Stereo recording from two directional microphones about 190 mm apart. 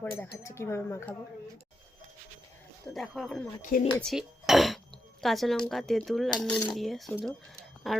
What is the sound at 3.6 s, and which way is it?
Speech, 45° left (ahead or behind).